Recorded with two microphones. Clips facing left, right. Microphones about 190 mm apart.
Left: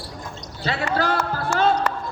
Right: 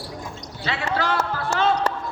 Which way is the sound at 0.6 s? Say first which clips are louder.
Left 2 dB; 40° left (ahead or behind).